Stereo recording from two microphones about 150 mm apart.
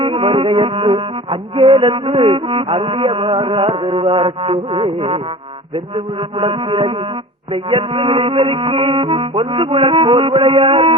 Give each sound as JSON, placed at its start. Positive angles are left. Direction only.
{"t": 0.0, "sound": "music", "side_deg": -35}